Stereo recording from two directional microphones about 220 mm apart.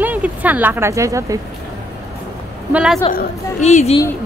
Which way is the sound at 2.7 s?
5° right (ahead or behind).